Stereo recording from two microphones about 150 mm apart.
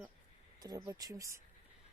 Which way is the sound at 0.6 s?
25° right (ahead or behind).